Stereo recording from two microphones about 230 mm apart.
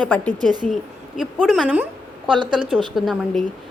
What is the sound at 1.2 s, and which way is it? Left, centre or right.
A woman's voice, centre.